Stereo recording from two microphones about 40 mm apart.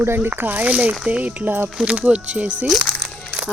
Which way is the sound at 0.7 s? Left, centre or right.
Right.